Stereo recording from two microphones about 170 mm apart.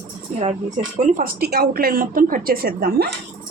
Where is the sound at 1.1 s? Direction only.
60° right (ahead or behind).